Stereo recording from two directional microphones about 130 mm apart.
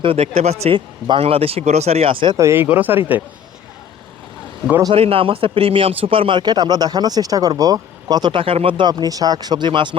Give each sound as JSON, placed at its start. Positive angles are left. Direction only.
{"t": 0.0, "sound": "speech", "side_deg": -50}
{"t": 0.6, "sound": "speech", "side_deg": -40}
{"t": 2.2, "sound": "speech", "side_deg": -25}
{"t": 4.9, "sound": "speech", "side_deg": -45}